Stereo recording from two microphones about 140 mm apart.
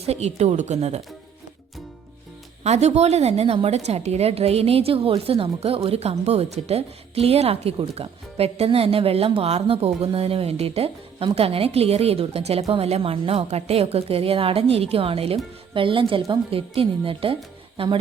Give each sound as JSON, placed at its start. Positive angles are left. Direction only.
{"t": 0.0, "sound": "a woman's voice", "side_deg": -50}
{"t": 2.6, "sound": "a woman's voice", "side_deg": -50}